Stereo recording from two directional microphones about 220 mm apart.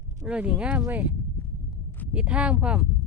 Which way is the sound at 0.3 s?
5° right (ahead or behind).